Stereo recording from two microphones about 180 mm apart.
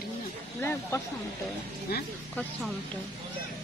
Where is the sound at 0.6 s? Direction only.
10° left (ahead or behind).